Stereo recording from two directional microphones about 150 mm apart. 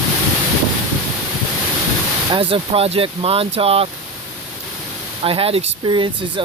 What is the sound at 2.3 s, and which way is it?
Speech, 35° right (ahead or behind).